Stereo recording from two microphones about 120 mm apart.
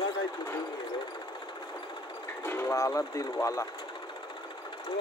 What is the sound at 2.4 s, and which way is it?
Speech, 20° left (ahead or behind).